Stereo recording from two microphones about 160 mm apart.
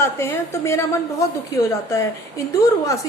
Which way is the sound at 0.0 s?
15° left (ahead or behind).